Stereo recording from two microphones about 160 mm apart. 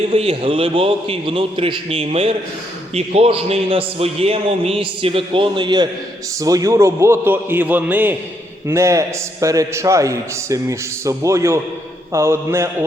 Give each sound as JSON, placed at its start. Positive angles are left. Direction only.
{"t": 0.1, "sound": "a man's voice", "side_deg": -40}